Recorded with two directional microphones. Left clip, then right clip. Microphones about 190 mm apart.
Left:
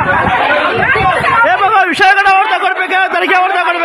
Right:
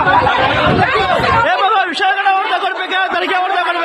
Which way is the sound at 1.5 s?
30° left (ahead or behind).